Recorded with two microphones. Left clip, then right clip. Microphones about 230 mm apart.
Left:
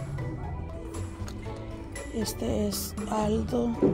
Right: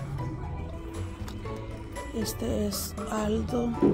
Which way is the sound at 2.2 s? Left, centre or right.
Centre.